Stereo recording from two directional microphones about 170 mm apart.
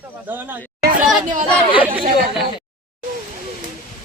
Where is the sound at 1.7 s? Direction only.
10° right (ahead or behind).